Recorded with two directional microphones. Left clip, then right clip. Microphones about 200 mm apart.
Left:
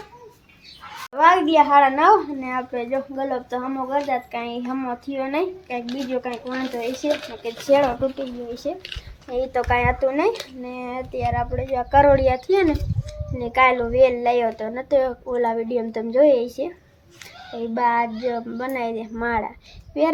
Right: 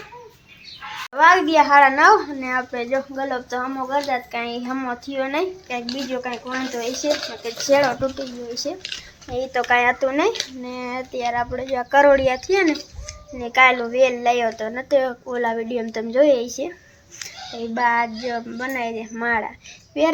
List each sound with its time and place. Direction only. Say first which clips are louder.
1.1 s a woman's voice: right 1 dB; centre (ahead or behind)
17.7 s a woman's voice: right 1 dB; 5° left (ahead or behind)